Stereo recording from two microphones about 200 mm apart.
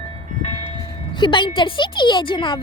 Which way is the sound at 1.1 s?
25° left (ahead or behind).